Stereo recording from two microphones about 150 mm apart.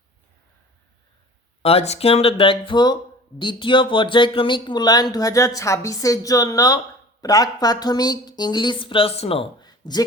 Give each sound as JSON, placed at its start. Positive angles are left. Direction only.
{"t": 1.6, "sound": "speech", "side_deg": 45}